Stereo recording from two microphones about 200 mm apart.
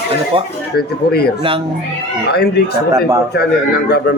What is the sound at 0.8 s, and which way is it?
Speech, 50° left (ahead or behind).